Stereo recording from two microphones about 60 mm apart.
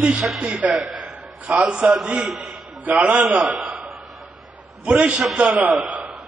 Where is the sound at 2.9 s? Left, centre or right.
Right.